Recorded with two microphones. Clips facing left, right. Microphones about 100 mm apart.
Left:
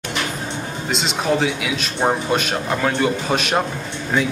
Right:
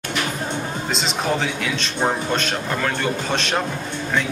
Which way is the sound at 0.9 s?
Centre (ahead or behind).